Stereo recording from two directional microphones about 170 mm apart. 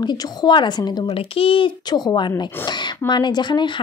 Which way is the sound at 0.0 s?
25° left (ahead or behind).